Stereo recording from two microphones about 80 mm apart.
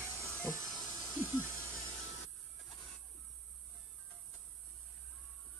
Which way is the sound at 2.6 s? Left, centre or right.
Centre.